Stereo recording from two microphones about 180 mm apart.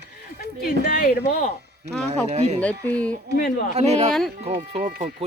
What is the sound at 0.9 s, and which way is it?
Speech, 55° left (ahead or behind).